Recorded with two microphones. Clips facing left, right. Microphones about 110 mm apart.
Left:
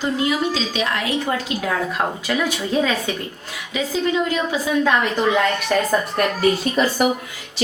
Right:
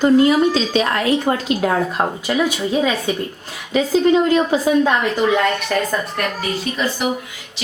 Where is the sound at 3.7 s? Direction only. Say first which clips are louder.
Right 7 dB; 40° right (ahead or behind).